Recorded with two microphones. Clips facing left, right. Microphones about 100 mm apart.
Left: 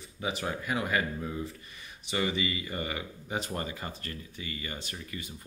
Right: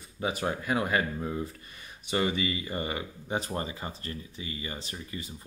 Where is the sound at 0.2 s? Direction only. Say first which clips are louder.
Right 3 dB; 40° right (ahead or behind).